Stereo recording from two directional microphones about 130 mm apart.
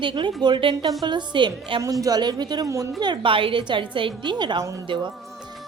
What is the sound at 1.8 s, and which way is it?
A woman's voice, 25° right (ahead or behind).